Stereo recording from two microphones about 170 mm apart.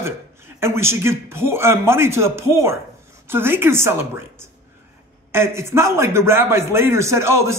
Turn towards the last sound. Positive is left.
turn(degrees=-15)  # may be behind; listen again after turning